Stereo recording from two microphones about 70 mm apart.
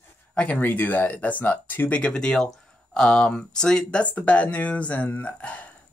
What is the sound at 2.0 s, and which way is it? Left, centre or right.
Speech, centre.